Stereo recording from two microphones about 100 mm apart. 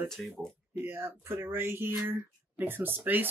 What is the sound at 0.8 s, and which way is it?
Speech, 25° right (ahead or behind).